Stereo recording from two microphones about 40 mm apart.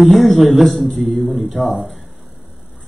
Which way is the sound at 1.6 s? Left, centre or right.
Right.